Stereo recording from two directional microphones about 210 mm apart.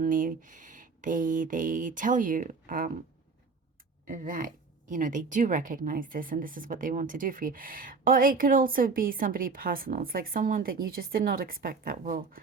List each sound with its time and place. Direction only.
0.0 s speech: 40° right (ahead or behind)
4.0 s speech: 40° right (ahead or behind)